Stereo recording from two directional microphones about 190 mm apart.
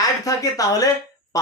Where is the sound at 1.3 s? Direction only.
20° left (ahead or behind).